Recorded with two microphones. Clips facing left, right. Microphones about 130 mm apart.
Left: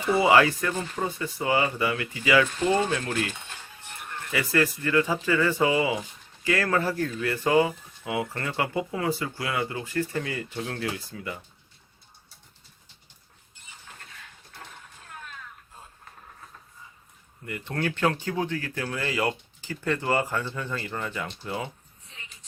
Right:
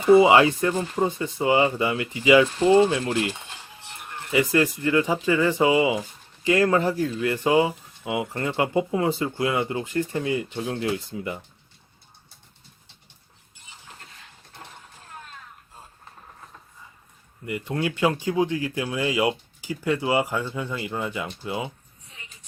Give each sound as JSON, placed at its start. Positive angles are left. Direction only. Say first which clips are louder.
{"t": 0.0, "sound": "speech", "louder": "right 5 dB", "side_deg": -20}
{"t": 17.7, "sound": "speech", "louder": "right 2 dB", "side_deg": -10}